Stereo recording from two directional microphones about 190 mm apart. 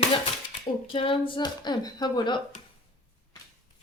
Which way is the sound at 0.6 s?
30° left (ahead or behind).